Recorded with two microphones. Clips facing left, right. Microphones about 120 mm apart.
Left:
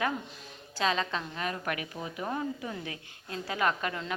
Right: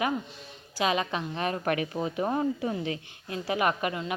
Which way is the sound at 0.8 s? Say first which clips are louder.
Right 2 dB; 15° right (ahead or behind).